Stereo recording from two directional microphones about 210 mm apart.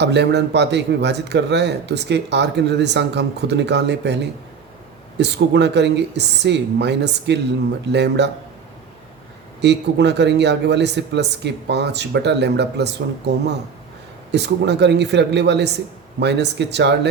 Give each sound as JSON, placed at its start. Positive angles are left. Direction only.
{"t": 0.0, "sound": "a man's voice", "side_deg": -55}
{"t": 9.6, "sound": "a man's voice", "side_deg": -55}